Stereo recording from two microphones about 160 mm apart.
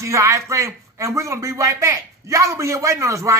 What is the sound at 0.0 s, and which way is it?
A child's voice, 20° right (ahead or behind).